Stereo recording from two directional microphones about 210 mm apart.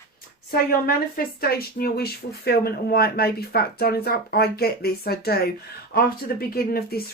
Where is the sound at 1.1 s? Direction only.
45° left (ahead or behind).